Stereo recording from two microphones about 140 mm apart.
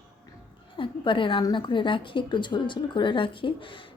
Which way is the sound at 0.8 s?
35° left (ahead or behind).